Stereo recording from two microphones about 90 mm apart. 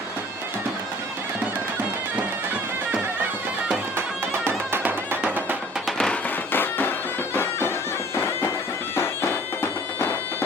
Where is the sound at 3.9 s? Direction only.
25° right (ahead or behind).